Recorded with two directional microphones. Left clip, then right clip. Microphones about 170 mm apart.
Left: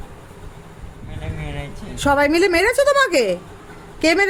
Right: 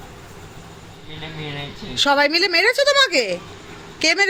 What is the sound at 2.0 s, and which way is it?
A woman's voice, 15° left (ahead or behind).